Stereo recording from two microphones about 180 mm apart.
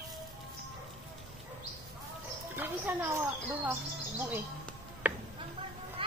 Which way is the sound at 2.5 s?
10° right (ahead or behind).